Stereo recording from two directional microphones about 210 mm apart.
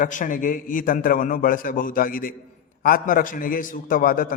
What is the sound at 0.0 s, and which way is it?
A man's voice, 40° left (ahead or behind).